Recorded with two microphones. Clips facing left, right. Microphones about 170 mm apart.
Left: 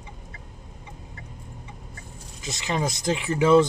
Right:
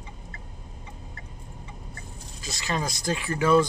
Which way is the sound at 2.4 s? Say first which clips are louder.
Left 3 dB; 20° left (ahead or behind).